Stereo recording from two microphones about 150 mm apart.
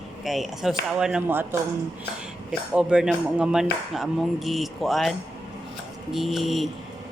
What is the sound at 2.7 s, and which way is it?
Speech, 5° right (ahead or behind).